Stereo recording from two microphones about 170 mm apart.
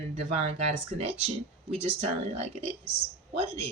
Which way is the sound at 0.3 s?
40° right (ahead or behind).